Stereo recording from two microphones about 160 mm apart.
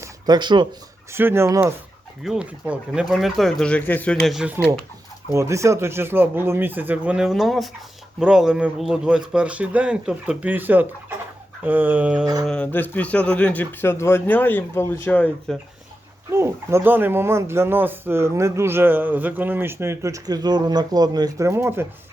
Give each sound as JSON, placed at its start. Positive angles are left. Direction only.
{"t": 0.0, "sound": "speech", "side_deg": -25}
{"t": 1.1, "sound": "speech", "side_deg": -15}
{"t": 2.2, "sound": "speech", "side_deg": -5}
{"t": 5.3, "sound": "speech", "side_deg": -20}
{"t": 12.2, "sound": "mantra", "side_deg": -25}
{"t": 12.5, "sound": "a man's voice", "side_deg": 10}
{"t": 16.3, "sound": "speech", "side_deg": -15}